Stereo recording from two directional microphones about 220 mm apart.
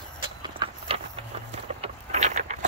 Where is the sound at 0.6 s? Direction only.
20° right (ahead or behind).